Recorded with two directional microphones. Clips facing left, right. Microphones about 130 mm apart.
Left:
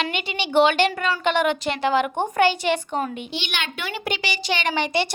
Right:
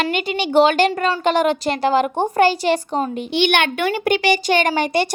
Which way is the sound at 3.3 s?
60° right (ahead or behind).